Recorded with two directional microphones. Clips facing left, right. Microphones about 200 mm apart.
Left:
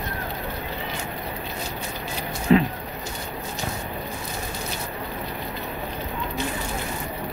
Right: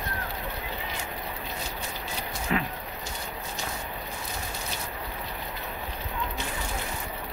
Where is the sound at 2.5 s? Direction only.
30° left (ahead or behind).